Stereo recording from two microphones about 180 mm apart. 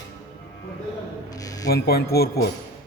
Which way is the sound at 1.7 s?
60° left (ahead or behind).